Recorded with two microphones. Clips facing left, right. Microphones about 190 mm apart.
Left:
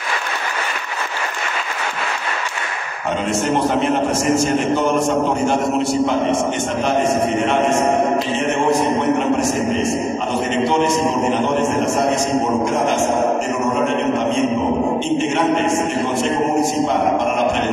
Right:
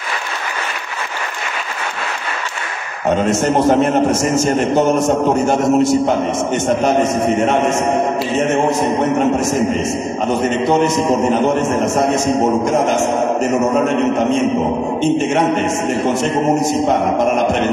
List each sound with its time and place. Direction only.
3.3 s a man's voice: 40° right (ahead or behind)
5.5 s a man's voice: 45° right (ahead or behind)
10.9 s a man's voice: 45° right (ahead or behind)